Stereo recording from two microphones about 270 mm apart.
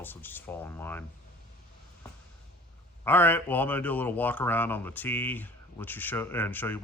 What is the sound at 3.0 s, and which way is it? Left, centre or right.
Speech, centre.